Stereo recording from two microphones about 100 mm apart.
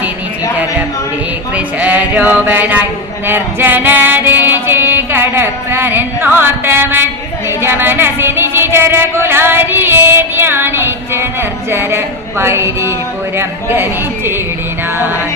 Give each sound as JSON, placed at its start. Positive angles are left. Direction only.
{"t": 1.5, "sound": "speech", "side_deg": -15}
{"t": 3.2, "sound": "music", "side_deg": -20}
{"t": 7.6, "sound": "a sound", "side_deg": -20}